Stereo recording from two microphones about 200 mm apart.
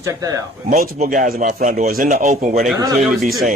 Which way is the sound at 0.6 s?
40° right (ahead or behind).